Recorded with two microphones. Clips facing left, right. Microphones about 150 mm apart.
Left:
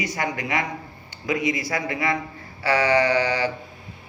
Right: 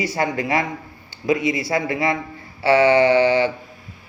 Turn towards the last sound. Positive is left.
turn(degrees=-25)  # may be behind; listen again after turning